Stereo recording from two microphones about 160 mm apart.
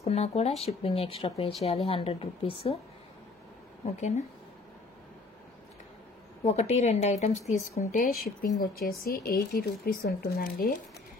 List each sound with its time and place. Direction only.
0.0 s speech: 40° left (ahead or behind)
3.8 s speech: 45° left (ahead or behind)
6.4 s speech: 45° left (ahead or behind); by 10.7 s 70° left (ahead or behind)